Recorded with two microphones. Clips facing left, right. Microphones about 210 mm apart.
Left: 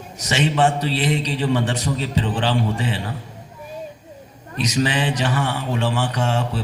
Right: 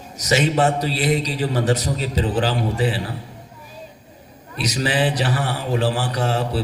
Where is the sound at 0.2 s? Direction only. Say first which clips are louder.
Right 1 dB; 40° right (ahead or behind).